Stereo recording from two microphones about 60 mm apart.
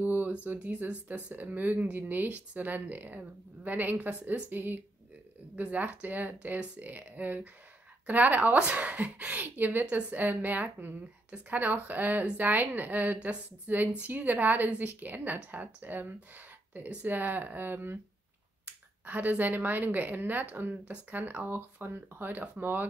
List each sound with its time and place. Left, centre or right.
0.0 s speech: right